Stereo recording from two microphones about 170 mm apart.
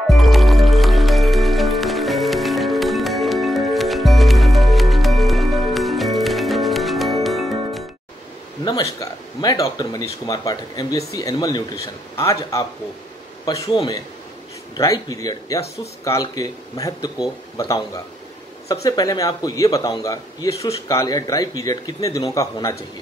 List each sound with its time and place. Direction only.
0.1 s music: centre (ahead or behind)
8.6 s a man's voice: 20° left (ahead or behind)